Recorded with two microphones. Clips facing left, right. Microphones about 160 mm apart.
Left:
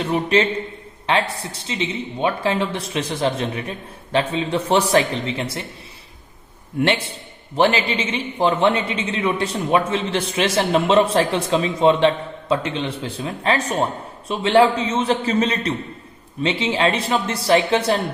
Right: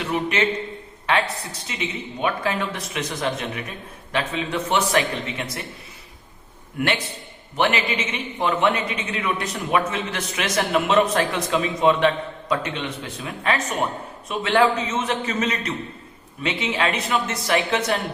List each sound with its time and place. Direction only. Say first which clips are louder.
0.0 s a man's voice: left 5 dB; 30° left (ahead or behind)
1.6 s a man's voice: left 5 dB; 30° left (ahead or behind)
6.7 s a man's voice: left 4 dB; 30° left (ahead or behind)